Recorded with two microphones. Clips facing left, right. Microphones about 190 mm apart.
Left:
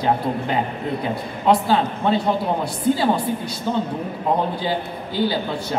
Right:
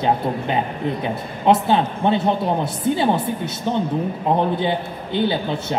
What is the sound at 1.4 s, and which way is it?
A man's voice, 25° right (ahead or behind).